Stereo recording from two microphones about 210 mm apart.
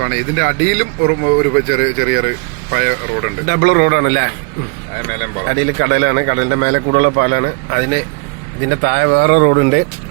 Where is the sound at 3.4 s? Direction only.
50° right (ahead or behind).